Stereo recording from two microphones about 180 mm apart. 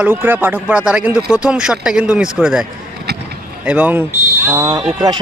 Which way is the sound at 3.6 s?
10° right (ahead or behind).